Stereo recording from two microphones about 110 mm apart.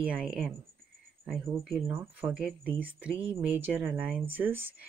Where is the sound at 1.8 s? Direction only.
15° right (ahead or behind).